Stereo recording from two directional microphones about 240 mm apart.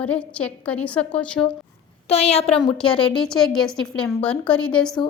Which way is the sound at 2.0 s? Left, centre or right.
Left.